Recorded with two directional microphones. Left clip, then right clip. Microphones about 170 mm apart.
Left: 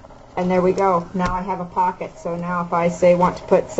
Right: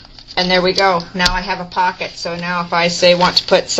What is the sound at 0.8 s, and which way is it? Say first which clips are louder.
Speech: right 5 dB; 30° right (ahead or behind).